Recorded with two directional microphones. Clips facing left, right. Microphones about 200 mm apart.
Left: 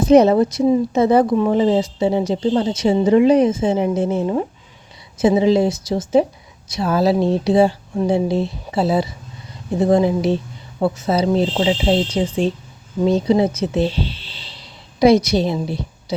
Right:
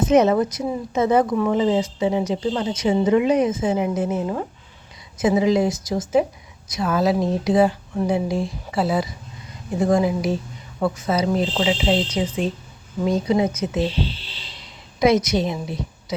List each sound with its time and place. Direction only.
0.1 s a woman's voice: 30° left (ahead or behind)
14.9 s a woman's voice: 30° left (ahead or behind)